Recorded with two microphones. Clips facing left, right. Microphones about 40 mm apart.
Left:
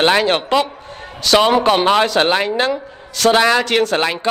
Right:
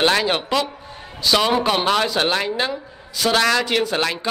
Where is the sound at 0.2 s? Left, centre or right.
Left.